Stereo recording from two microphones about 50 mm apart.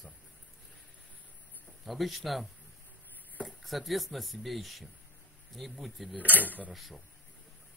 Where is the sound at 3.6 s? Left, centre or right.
Centre.